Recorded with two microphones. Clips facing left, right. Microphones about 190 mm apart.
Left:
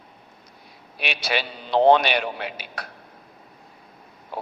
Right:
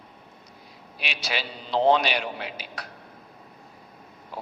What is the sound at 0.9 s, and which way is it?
A man's voice, 60° left (ahead or behind).